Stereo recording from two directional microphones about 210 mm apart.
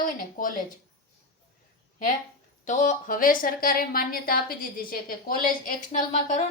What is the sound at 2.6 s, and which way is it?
A woman's voice, 35° left (ahead or behind).